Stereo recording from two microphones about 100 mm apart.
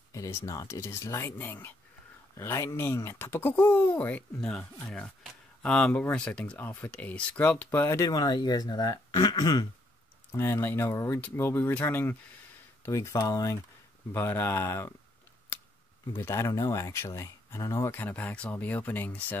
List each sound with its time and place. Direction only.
0.1 s speech: 30° left (ahead or behind)
8.0 s speech: 40° left (ahead or behind)
10.3 s speech: 25° left (ahead or behind)
14.1 s speech: 20° left (ahead or behind)
16.1 s speech: 25° left (ahead or behind)